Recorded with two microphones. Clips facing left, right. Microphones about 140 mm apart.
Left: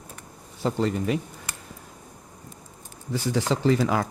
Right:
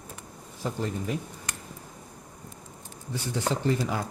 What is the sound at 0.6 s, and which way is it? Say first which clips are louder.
Speech: left 6 dB; 85° left.